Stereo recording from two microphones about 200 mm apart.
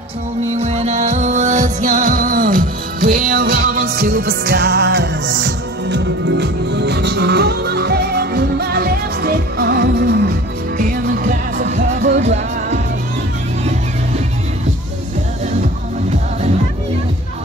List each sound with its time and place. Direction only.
0.6 s music: 30° right (ahead or behind)